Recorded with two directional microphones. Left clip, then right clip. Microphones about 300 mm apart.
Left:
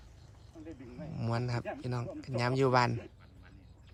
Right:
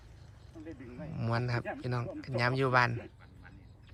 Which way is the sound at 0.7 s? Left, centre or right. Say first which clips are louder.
Right 1 dB; centre.